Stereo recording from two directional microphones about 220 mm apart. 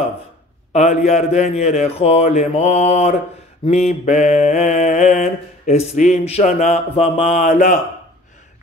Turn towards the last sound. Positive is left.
turn(degrees=35)  # may be behind; listen again after turning